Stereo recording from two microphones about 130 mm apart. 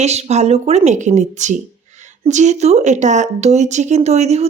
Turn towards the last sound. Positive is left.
turn(degrees=-55)  # may be behind; listen again after turning